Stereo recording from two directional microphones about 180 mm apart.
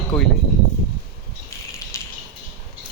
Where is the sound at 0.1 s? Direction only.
5° left (ahead or behind).